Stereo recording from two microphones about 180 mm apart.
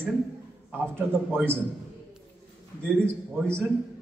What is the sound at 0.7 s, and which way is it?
Speech, 10° right (ahead or behind).